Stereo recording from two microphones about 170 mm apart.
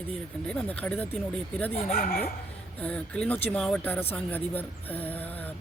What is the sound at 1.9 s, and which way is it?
Speech, 60° left (ahead or behind).